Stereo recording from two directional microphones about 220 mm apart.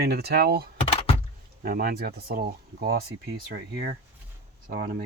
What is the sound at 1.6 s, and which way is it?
Speech, 40° right (ahead or behind).